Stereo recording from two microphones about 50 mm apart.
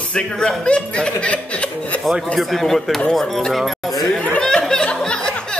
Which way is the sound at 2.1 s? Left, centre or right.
Centre.